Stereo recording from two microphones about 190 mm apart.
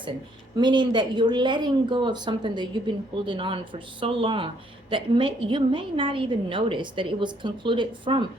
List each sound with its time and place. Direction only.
0.6 s speech: 25° right (ahead or behind)